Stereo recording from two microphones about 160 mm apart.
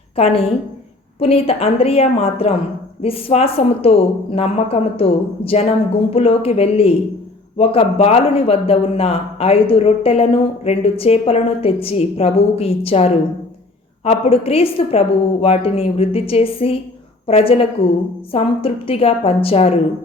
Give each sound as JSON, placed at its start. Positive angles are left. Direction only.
{"t": 0.2, "sound": "a man's voice", "side_deg": 40}